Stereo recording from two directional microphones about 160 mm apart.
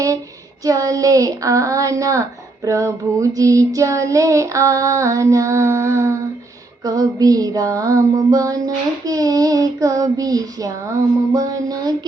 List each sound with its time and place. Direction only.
0.6 s music: 20° right (ahead or behind)